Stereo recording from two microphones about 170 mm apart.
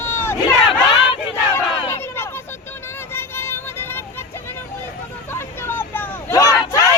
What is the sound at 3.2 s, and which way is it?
Vehicle, 15° left (ahead or behind).